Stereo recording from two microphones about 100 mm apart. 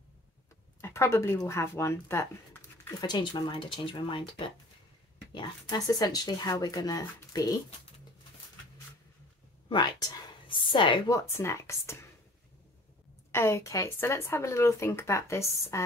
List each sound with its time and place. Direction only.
0.7 s speech: 25° left (ahead or behind)
3.0 s speech: 45° left (ahead or behind)
5.7 s speech: 40° left (ahead or behind)
9.7 s a sound: 50° left (ahead or behind)
11.1 s speech: 30° left (ahead or behind)
13.3 s speech: 25° left (ahead or behind)